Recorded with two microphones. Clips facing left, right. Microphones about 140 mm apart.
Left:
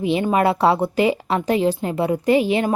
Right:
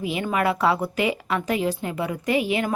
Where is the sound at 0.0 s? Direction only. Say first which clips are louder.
Left 6 dB; 30° left (ahead or behind).